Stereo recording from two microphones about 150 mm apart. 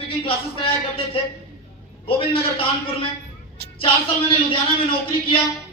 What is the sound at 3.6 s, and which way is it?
Child singing, 90° right.